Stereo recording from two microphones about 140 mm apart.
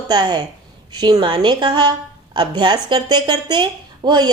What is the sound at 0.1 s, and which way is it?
Speech, 30° right (ahead or behind).